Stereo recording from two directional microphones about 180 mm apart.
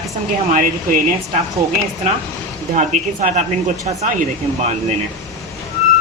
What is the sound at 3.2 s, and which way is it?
Speech, 45° right (ahead or behind).